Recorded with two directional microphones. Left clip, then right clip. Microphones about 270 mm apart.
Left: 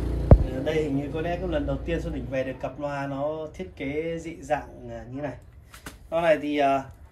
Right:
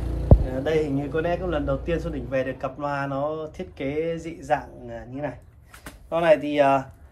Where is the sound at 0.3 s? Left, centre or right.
Right.